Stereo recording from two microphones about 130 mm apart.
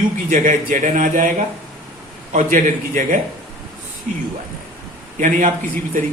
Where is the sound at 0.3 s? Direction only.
90° right.